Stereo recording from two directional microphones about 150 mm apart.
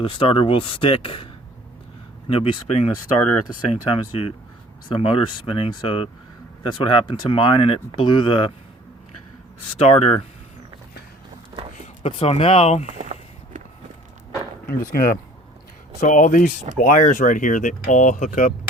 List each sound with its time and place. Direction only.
0.0 s speech: 35° left (ahead or behind)
9.8 s speech: 40° left (ahead or behind)
12.0 s speech: 40° left (ahead or behind)
13.0 s a sound: 55° right (ahead or behind)
14.7 s speech: 80° left
16.0 s speech: 60° left (ahead or behind)